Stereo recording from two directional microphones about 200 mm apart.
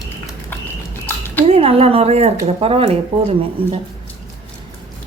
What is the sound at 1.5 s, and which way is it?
Speech, 30° right (ahead or behind).